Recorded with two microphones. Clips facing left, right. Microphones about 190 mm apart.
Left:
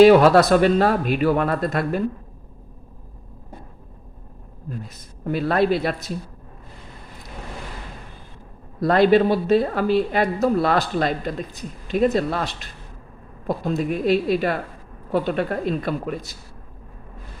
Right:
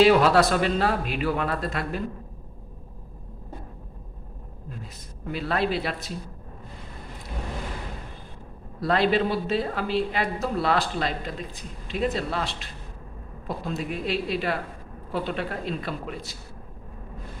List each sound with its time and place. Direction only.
0.0 s speech: 50° left (ahead or behind)
5.2 s speech: 45° left (ahead or behind)
8.8 s speech: 45° left (ahead or behind)
13.7 s speech: 45° left (ahead or behind)